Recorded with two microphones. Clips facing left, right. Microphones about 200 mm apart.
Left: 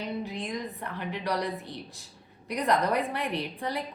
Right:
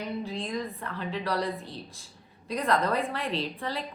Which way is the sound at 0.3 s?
20° left (ahead or behind).